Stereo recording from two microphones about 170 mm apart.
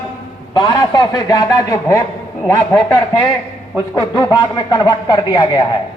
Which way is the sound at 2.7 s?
5° left (ahead or behind).